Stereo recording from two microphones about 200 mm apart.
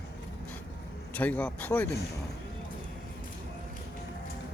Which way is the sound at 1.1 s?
5° left (ahead or behind).